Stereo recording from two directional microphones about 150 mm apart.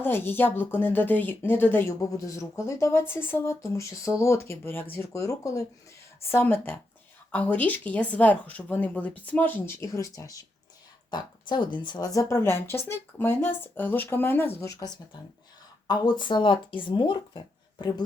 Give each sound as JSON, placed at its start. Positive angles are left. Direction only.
{"t": 0.0, "sound": "speech", "side_deg": 15}
{"t": 15.9, "sound": "speech", "side_deg": 30}